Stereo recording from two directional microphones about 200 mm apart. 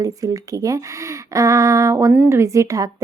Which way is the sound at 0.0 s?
15° right (ahead or behind).